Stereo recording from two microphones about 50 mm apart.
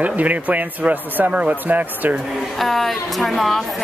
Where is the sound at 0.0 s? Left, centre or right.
Right.